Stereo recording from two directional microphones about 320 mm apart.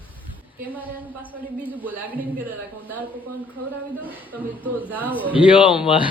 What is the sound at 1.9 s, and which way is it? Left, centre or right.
Speech, centre.